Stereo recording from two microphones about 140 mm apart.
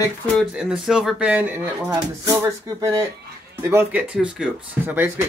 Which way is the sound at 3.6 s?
15° right (ahead or behind).